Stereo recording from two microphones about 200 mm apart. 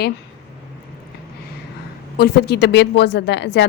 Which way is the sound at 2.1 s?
55° left (ahead or behind).